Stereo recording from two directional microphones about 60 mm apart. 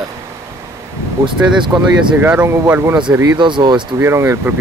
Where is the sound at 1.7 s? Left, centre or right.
Right.